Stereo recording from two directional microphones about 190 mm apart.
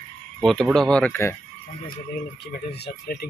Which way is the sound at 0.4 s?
Centre (ahead or behind).